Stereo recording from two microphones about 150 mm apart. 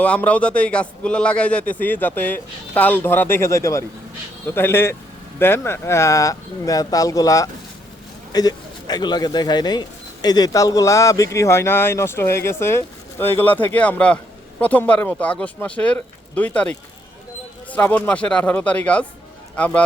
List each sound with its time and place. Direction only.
0.0 s a man's voice: 10° left (ahead or behind)